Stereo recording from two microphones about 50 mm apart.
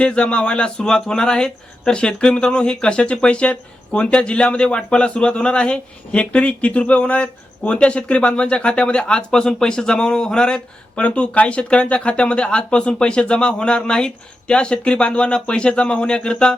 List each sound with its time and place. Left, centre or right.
0.0 s speech: left